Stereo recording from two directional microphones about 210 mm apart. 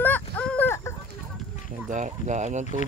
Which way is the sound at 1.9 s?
35° right (ahead or behind).